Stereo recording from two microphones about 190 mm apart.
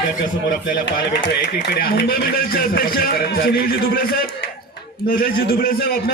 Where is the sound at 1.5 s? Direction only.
55° left (ahead or behind).